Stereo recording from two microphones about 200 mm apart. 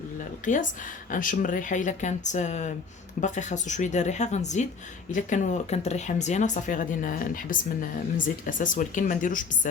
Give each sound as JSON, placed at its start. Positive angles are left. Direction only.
{"t": 0.5, "sound": "speech", "side_deg": 40}